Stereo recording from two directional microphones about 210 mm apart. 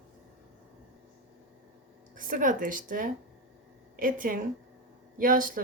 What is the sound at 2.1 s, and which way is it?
A woman's voice, 40° right (ahead or behind).